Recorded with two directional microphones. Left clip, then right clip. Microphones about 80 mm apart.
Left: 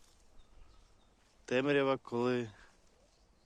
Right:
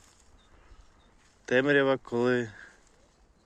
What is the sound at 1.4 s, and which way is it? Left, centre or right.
Speech, left.